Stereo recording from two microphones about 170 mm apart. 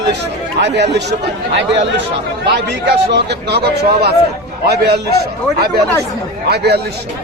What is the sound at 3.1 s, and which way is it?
Speech, 75° right (ahead or behind).